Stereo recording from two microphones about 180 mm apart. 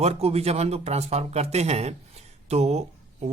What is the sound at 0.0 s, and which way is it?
A man's voice, 35° right (ahead or behind).